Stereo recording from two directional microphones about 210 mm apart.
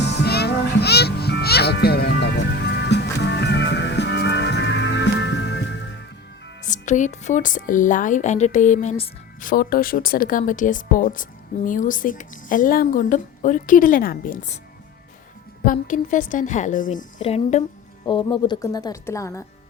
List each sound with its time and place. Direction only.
0.0 s music: 55° left (ahead or behind)
6.7 s speech: 35° left (ahead or behind)
15.6 s speech: 40° left (ahead or behind); by 19.5 s 15° left (ahead or behind)